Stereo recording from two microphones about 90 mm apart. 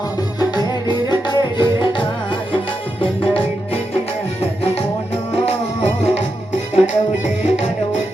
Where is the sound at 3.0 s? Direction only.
85° left.